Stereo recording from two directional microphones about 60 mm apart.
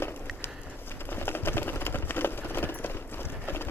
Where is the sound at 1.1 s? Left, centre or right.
Left.